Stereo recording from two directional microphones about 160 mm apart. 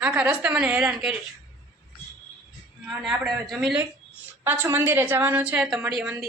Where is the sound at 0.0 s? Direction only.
10° right (ahead or behind).